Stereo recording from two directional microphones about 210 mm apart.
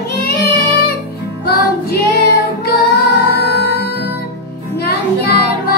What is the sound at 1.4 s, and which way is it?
Music, 50° left (ahead or behind).